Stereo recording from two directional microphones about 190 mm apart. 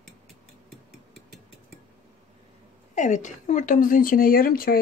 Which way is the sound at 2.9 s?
40° left (ahead or behind).